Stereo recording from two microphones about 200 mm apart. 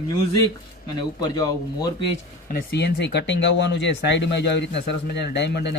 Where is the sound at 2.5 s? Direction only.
55° left (ahead or behind).